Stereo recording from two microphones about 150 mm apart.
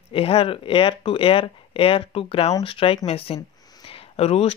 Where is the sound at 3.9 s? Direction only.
40° left (ahead or behind).